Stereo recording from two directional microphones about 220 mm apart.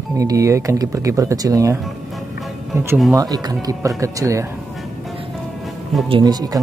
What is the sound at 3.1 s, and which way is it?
Speech, 15° right (ahead or behind).